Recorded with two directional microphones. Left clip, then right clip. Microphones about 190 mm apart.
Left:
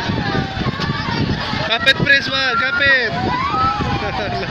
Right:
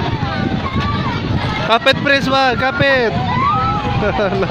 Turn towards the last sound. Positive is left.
turn(degrees=-35)  # may be behind; listen again after turning